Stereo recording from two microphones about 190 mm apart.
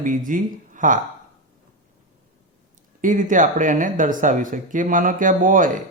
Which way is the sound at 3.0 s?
40° right (ahead or behind).